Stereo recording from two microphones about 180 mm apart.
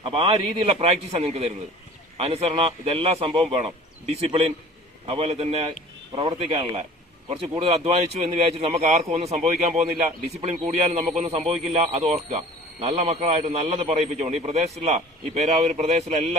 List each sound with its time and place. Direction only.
0.0 s speech: 30° right (ahead or behind)